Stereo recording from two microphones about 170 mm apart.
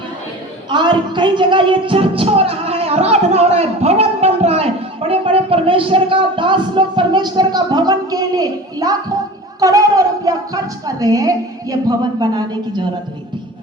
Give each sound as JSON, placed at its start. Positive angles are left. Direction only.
{"t": 0.7, "sound": "music", "side_deg": -25}
{"t": 9.6, "sound": "a woman's voice", "side_deg": -20}